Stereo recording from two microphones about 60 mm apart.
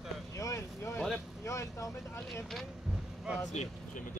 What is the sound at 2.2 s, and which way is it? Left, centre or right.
Speech, centre.